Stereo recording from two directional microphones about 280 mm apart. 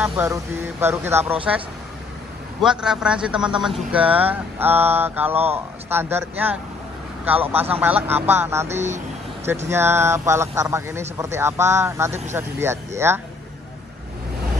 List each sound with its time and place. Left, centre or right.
0.0 s speech: centre
2.6 s speech: centre
8.6 s speech: right
9.7 s speech: centre